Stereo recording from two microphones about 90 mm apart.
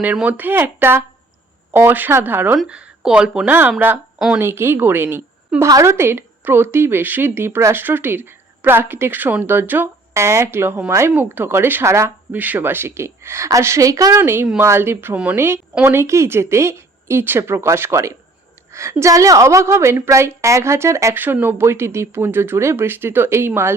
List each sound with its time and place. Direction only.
0.0 s speech: 20° right (ahead or behind)
2.6 s speech: 10° right (ahead or behind)
5.6 s speech: 35° right (ahead or behind)
12.3 s speech: 20° right (ahead or behind); by 14.2 s 40° right (ahead or behind)
14.2 s speech: 25° right (ahead or behind)
15.1 s speech: 15° right (ahead or behind)
15.4 s a woman's voice: 25° right (ahead or behind)